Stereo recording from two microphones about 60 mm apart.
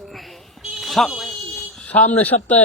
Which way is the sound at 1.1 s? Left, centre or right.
Centre.